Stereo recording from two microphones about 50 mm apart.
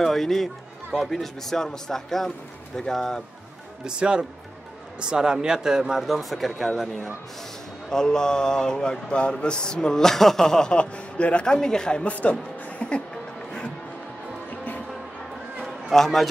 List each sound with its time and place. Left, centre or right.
0.0 s a man's voice: centre
3.8 s speech: centre
6.0 s speech: centre
7.9 s a man's voice: centre
15.6 s a sound: centre